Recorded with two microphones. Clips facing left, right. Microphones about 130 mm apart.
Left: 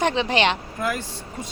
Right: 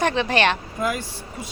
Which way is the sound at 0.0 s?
15° left (ahead or behind).